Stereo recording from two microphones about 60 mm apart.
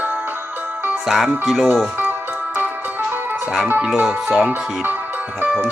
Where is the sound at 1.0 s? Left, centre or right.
Centre.